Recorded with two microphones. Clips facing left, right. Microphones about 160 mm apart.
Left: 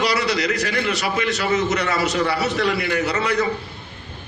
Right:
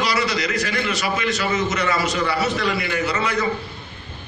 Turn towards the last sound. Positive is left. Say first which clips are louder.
# left 2 dB
turn(degrees=65)  # may be behind; listen again after turning